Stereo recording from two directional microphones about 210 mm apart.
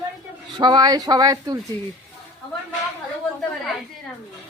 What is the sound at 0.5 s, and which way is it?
A woman's voice, 20° right (ahead or behind).